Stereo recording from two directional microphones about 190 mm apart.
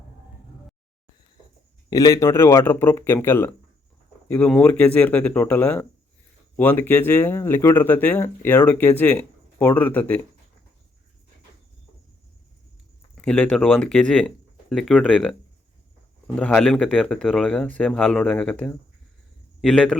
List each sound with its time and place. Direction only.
1.9 s speech: 20° left (ahead or behind)
13.1 s speech: 5° left (ahead or behind)